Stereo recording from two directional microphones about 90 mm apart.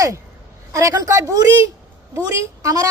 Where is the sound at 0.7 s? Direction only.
35° right (ahead or behind).